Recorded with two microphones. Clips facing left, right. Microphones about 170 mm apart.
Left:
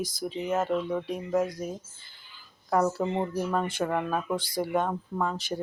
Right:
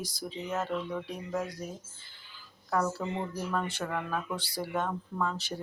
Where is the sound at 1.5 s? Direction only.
15° left (ahead or behind).